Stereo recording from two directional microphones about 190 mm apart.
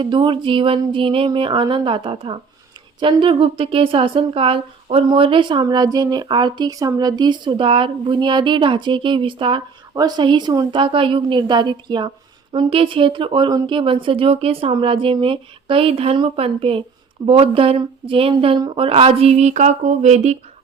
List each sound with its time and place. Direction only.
0.0 s speech: 25° right (ahead or behind)